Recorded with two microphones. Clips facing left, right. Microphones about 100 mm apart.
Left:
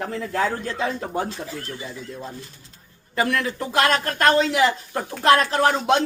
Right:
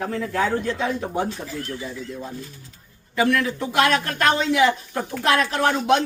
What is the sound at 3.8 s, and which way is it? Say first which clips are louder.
A woman's voice: left 1 dB; 35° left (ahead or behind).